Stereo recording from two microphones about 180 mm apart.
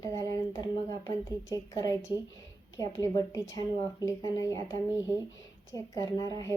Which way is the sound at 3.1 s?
20° left (ahead or behind).